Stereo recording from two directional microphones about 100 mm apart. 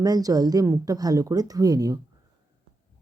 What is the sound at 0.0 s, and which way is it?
Speech, 40° right (ahead or behind).